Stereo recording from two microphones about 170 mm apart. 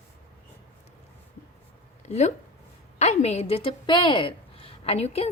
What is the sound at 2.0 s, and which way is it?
A woman's voice, 40° left (ahead or behind).